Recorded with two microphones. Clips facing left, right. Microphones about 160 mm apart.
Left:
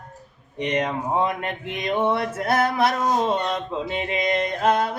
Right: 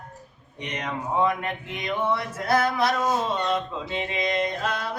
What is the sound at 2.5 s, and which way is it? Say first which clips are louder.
Music: left 1 dB; 55° left (ahead or behind).